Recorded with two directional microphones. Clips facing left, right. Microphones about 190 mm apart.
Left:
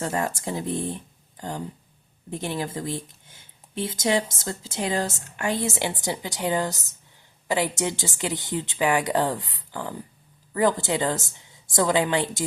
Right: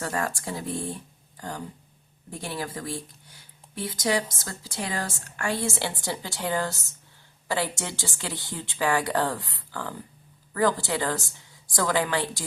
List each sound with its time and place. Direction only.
0.0 s speech: 20° left (ahead or behind)